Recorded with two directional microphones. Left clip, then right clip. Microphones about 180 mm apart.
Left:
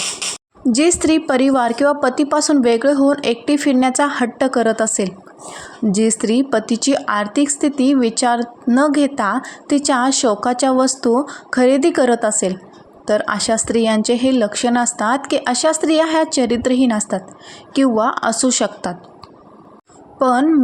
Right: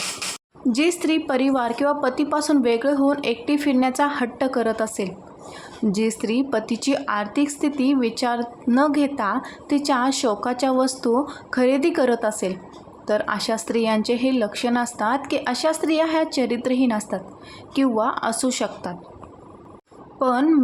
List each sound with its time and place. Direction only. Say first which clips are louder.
0.7 s a woman's voice: left 6 dB; 20° left (ahead or behind)
20.1 s a woman's voice: left 5 dB; 20° left (ahead or behind)